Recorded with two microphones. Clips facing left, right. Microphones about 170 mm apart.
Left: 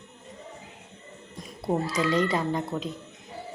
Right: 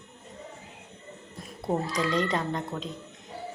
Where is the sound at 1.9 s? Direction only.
5° left (ahead or behind).